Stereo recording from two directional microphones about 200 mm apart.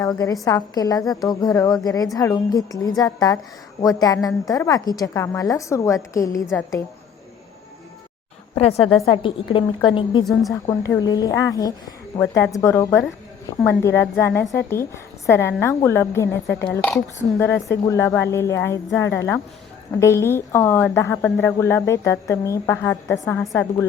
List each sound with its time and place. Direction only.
0.0 s a woman's voice: 15° left (ahead or behind)
8.5 s a woman's voice: 30° left (ahead or behind); by 18.8 s 15° left (ahead or behind)
19.9 s a woman's voice: 15° left (ahead or behind)